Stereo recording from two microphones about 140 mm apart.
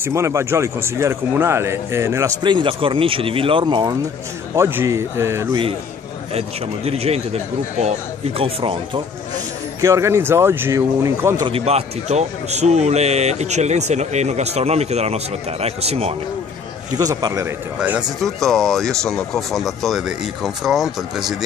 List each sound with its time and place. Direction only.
0.0 s speech: 20° right (ahead or behind)
2.4 s speech: 35° right (ahead or behind)
4.6 s speech: 20° right (ahead or behind)
6.3 s speech: 45° right (ahead or behind)
9.8 s speech: 20° right (ahead or behind)
11.5 s speech: 45° right (ahead or behind)
16.9 s speech: 25° right (ahead or behind)
17.7 s speech: 10° right (ahead or behind)
18.2 s speech: centre (ahead or behind)